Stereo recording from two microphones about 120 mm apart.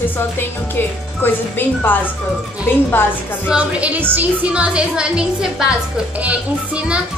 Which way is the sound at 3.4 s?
10° right (ahead or behind).